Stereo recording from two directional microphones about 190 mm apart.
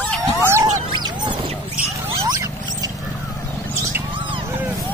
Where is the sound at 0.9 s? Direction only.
25° right (ahead or behind).